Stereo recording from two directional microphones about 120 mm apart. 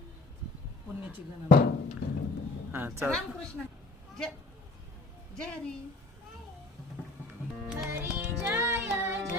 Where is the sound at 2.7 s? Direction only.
15° right (ahead or behind).